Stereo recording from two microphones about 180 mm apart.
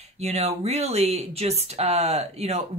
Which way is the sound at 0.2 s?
35° right (ahead or behind).